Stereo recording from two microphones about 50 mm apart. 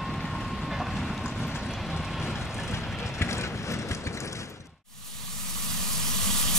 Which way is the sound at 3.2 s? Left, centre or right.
Left.